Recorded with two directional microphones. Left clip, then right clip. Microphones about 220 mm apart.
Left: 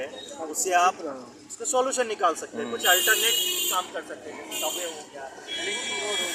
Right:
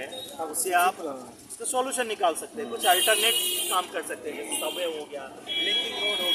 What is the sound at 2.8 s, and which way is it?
Speech, 20° right (ahead or behind).